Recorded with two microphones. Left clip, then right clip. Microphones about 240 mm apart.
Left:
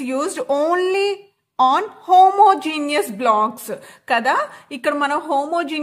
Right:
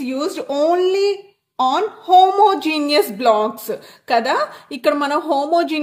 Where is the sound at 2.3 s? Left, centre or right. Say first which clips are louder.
Left 1 dB; left.